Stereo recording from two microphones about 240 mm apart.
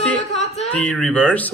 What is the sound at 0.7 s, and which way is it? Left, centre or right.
Speech, centre.